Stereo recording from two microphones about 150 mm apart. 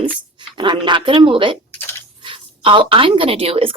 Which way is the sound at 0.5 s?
35° right (ahead or behind).